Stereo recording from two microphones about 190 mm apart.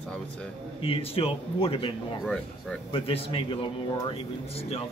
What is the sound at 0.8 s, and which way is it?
A man's voice, 30° left (ahead or behind).